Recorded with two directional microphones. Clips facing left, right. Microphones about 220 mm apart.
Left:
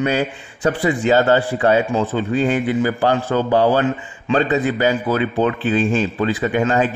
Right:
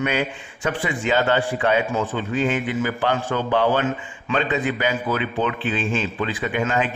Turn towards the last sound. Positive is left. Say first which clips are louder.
# left 5 dB
turn(degrees=40)  # may be behind; listen again after turning